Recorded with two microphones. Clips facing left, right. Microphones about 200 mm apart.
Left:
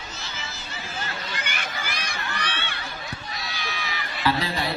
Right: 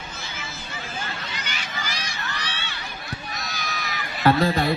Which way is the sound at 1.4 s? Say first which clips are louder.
Left 1 dB; 55° left (ahead or behind).